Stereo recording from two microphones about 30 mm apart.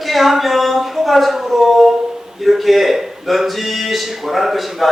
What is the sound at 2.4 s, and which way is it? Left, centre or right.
A man's voice, centre.